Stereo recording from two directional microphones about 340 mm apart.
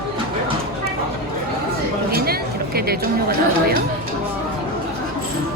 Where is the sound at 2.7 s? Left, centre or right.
Right.